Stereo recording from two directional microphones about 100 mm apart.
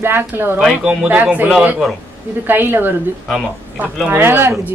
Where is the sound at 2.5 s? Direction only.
20° right (ahead or behind).